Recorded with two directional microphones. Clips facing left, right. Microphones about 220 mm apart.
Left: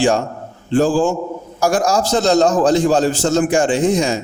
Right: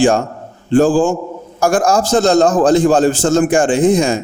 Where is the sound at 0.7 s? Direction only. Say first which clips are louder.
Right 3 dB; 50° right (ahead or behind).